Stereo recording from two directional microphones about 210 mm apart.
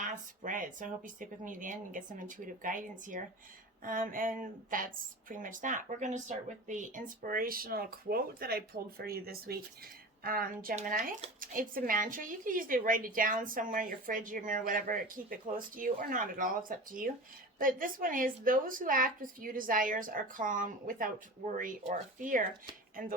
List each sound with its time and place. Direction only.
0.0 s speech: 35° right (ahead or behind)